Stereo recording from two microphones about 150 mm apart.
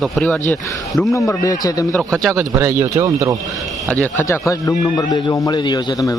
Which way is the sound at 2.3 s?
15° right (ahead or behind).